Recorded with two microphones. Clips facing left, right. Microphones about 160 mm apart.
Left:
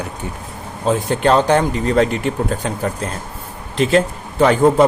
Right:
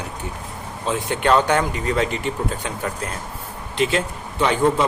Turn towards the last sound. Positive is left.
turn(degrees=45)  # may be behind; listen again after turning